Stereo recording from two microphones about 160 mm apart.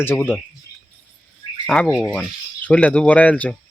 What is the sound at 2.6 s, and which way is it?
Speech, 5° left (ahead or behind).